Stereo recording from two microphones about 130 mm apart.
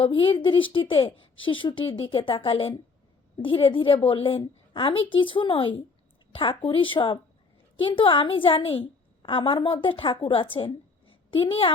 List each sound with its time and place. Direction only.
0.0 s a woman's voice: 40° left (ahead or behind)